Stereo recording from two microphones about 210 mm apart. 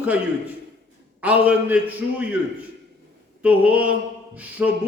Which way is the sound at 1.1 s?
5° right (ahead or behind).